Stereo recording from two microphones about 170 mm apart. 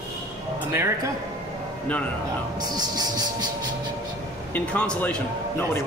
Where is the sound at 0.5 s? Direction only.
15° right (ahead or behind).